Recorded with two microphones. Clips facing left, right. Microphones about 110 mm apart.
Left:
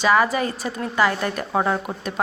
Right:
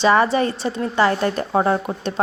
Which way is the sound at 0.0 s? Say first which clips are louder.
Right 3 dB; 30° right (ahead or behind).